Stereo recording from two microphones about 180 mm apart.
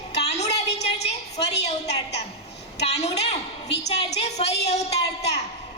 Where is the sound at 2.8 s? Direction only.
40° left (ahead or behind).